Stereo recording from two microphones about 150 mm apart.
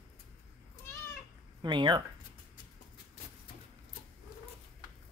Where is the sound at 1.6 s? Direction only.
30° right (ahead or behind).